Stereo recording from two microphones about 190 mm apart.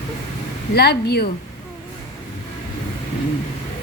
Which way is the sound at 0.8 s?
60° left (ahead or behind).